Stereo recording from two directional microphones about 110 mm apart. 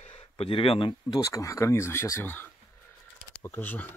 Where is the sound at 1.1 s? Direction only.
30° left (ahead or behind).